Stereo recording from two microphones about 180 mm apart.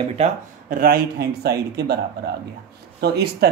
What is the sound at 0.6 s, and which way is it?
Speech, 55° right (ahead or behind).